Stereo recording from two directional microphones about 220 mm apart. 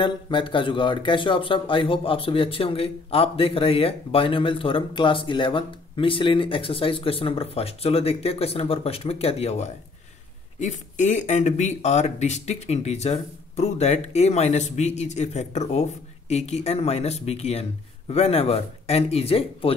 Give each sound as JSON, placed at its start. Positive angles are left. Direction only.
{"t": 0.0, "sound": "speech", "side_deg": 20}